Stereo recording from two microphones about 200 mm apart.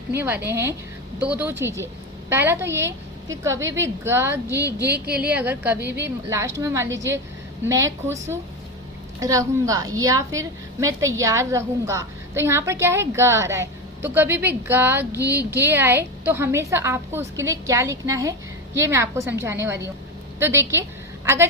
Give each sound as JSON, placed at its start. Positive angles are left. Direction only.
{"t": 0.4, "sound": "a woman's voice", "side_deg": -10}
{"t": 4.6, "sound": "a sound", "side_deg": -55}
{"t": 5.2, "sound": "a woman's voice", "side_deg": -5}
{"t": 5.8, "sound": "a sound", "side_deg": -60}
{"t": 6.2, "sound": "a woman's voice", "side_deg": -15}
{"t": 6.8, "sound": "speech", "side_deg": -65}
{"t": 7.7, "sound": "a woman's voice", "side_deg": -15}